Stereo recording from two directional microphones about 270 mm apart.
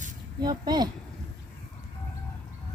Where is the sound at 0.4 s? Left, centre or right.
Centre.